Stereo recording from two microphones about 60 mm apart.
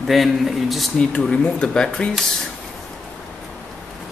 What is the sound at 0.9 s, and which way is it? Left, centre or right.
Speech, centre.